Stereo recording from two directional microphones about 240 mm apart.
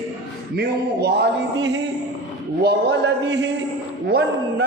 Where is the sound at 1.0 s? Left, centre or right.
Right.